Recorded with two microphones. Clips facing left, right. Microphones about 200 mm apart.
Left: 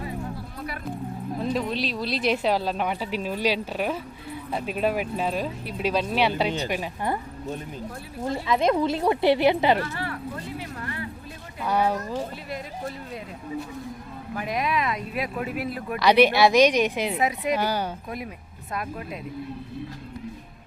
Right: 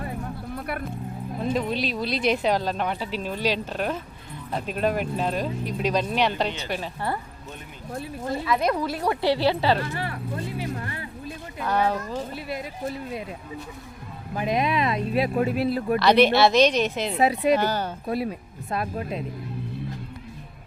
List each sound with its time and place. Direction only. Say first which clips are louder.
0.5 s music: right 4 dB; 55° right (ahead or behind)
1.5 s speech: right 1 dB; centre (ahead or behind); by 7.2 s 15° left (ahead or behind)
8.2 s speech: left 2 dB; 20° left (ahead or behind)
9.8 s speech: right 2 dB; 15° right (ahead or behind)
11.6 s speech: even; 10° left (ahead or behind)
14.3 s speech: right 3 dB; 25° right (ahead or behind)
16.0 s speech: left 1 dB; 10° left (ahead or behind)
17.2 s speech: right 4 dB; 30° right (ahead or behind)
17.5 s speech: right 3 dB; 10° left (ahead or behind)
18.1 s speech: right 8 dB; 30° right (ahead or behind)